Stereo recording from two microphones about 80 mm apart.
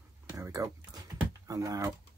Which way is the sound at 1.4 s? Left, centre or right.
Right.